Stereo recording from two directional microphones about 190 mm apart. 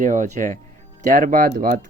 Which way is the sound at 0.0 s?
40° right (ahead or behind).